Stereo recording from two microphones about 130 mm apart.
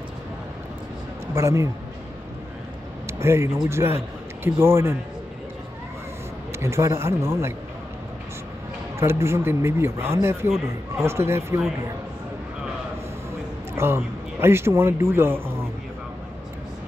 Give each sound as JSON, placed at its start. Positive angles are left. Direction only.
{"t": 1.3, "sound": "speech", "side_deg": -20}
{"t": 3.1, "sound": "a sound", "side_deg": -20}
{"t": 3.6, "sound": "speech", "side_deg": -20}
{"t": 6.6, "sound": "speech", "side_deg": -20}
{"t": 9.0, "sound": "speech", "side_deg": -20}
{"t": 13.7, "sound": "a man's voice", "side_deg": -20}